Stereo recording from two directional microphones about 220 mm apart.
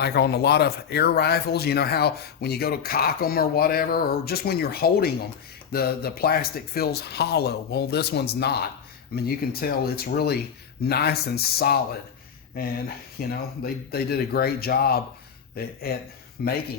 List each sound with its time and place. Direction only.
0.0 s speech: 50° left (ahead or behind)
13.2 s speech: 45° left (ahead or behind)